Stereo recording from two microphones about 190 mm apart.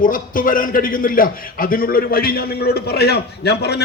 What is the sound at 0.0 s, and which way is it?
A man's voice, 45° left (ahead or behind).